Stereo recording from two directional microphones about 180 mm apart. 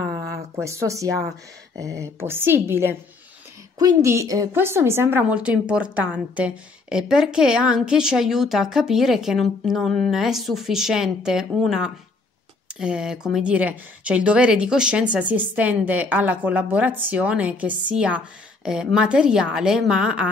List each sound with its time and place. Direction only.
0.6 s a woman's voice: 15° right (ahead or behind)